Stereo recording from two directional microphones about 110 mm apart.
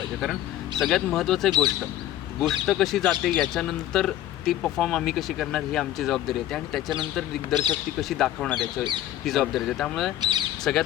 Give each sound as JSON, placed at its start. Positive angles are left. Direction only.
{"t": 0.8, "sound": "speech", "side_deg": 0}
{"t": 2.6, "sound": "speech", "side_deg": 5}
{"t": 7.5, "sound": "speech", "side_deg": -40}
{"t": 8.2, "sound": "speech", "side_deg": 5}
{"t": 8.5, "sound": "speech", "side_deg": -45}
{"t": 9.2, "sound": "speech", "side_deg": 0}
{"t": 10.2, "sound": "speech", "side_deg": -45}
{"t": 10.6, "sound": "speech", "side_deg": 5}